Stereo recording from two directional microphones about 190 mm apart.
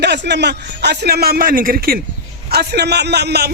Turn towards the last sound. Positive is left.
turn(degrees=-60)  # may be behind; listen again after turning